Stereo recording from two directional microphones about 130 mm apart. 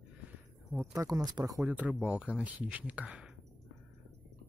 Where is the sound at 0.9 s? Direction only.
25° right (ahead or behind).